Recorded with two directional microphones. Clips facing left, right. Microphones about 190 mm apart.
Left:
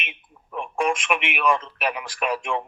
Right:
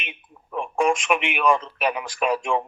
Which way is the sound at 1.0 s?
40° right (ahead or behind).